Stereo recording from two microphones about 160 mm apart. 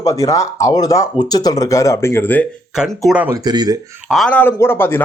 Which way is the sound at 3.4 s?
25° right (ahead or behind).